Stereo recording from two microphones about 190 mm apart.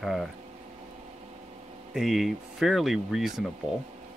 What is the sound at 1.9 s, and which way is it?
Speech, centre (ahead or behind).